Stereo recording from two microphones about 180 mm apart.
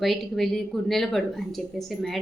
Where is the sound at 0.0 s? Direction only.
Centre (ahead or behind).